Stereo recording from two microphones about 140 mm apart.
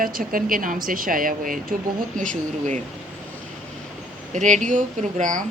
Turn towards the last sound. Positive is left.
turn(degrees=-65)  # may be behind; listen again after turning